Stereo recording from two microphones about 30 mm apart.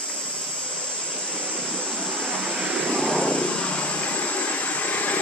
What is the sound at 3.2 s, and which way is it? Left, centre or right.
Vehicle, left.